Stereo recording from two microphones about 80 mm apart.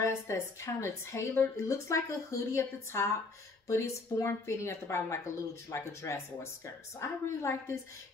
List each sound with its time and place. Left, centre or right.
0.0 s a woman's voice: left